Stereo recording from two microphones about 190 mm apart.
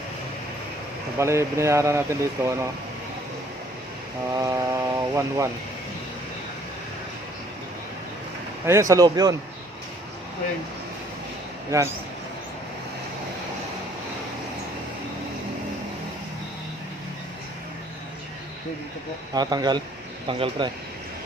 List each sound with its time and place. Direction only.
1.2 s speech: 15° right (ahead or behind)
4.4 s speech: 15° right (ahead or behind)
8.6 s speech: 15° right (ahead or behind)
11.7 s speech: 15° right (ahead or behind)
19.3 s speech: 20° right (ahead or behind)